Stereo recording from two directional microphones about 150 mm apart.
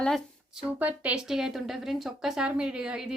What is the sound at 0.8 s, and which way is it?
A woman's voice, 10° right (ahead or behind).